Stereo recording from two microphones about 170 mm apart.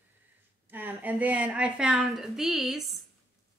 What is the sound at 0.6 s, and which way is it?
A woman's voice, 10° right (ahead or behind).